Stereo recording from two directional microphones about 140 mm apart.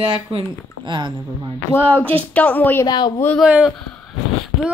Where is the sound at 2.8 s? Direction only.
30° left (ahead or behind).